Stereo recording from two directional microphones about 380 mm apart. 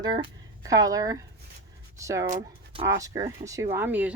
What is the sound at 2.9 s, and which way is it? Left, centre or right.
Speech, centre.